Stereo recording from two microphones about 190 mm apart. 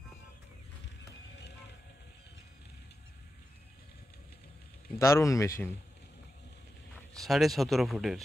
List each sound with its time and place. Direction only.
4.9 s speech: 15° left (ahead or behind)
7.2 s speech: centre (ahead or behind)